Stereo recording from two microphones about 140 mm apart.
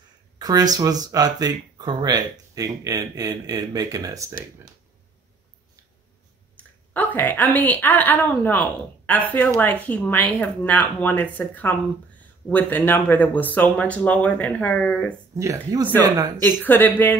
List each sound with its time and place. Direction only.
0.4 s a sound: 25° right (ahead or behind)
0.7 s speech: 25° right (ahead or behind)
6.9 s a woman's voice: 15° left (ahead or behind)
15.3 s speech: 20° right (ahead or behind)
16.4 s a woman's voice: 15° left (ahead or behind)